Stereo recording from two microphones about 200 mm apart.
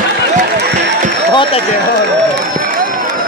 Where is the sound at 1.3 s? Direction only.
25° left (ahead or behind).